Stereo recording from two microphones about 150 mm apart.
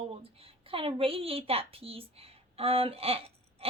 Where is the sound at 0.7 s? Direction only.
40° right (ahead or behind).